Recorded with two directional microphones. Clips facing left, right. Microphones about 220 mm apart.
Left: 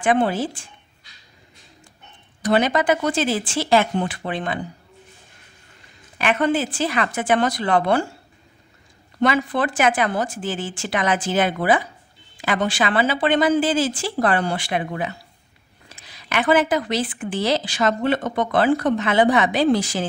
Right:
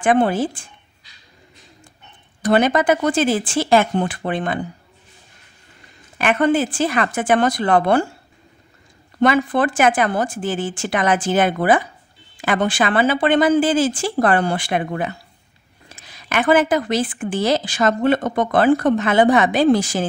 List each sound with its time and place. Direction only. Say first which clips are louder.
0.0 s a woman's voice: right 3 dB; 50° right (ahead or behind)
2.4 s a woman's voice: right 3 dB; 50° right (ahead or behind)
6.1 s a woman's voice: right 3 dB; 50° right (ahead or behind)
9.2 s a woman's voice: right 4 dB; 50° right (ahead or behind)